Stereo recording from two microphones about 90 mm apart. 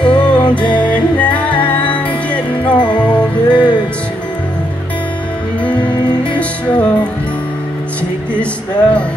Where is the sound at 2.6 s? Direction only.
60° left (ahead or behind).